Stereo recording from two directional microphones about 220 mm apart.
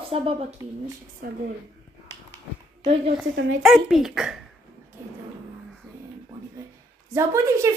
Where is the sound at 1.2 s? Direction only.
40° right (ahead or behind).